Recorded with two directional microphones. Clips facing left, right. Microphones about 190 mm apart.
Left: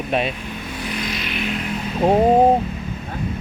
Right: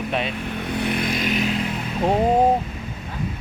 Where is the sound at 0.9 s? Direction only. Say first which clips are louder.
Right 4 dB; 55° right (ahead or behind).